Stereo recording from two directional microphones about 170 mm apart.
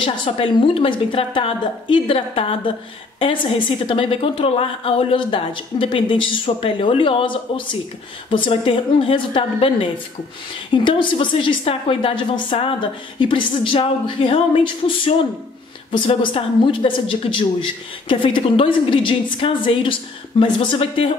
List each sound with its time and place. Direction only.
0.0 s a woman's voice: 30° left (ahead or behind)
15.9 s a woman's voice: 30° left (ahead or behind)